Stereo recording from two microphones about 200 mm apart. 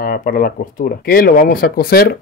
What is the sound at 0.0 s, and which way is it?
Speech, 45° left (ahead or behind).